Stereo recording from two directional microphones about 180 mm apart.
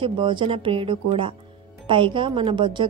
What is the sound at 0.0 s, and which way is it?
A woman's voice, 25° right (ahead or behind).